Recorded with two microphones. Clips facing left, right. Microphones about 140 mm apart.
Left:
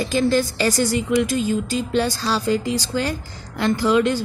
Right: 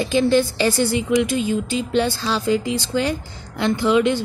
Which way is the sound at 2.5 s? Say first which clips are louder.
Right 2 dB; 45° left (ahead or behind).